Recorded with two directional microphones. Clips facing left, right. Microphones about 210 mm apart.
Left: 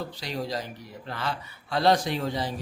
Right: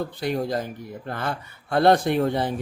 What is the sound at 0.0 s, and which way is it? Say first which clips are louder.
Speech: right 7 dB; 55° right (ahead or behind).